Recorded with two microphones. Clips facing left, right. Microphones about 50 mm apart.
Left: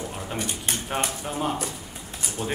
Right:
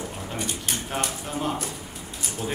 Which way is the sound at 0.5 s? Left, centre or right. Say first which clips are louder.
Left 1 dB; centre.